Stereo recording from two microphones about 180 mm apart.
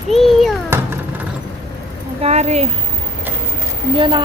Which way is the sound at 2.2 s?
40° right (ahead or behind).